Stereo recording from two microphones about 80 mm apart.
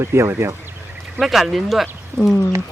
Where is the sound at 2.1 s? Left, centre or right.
Right.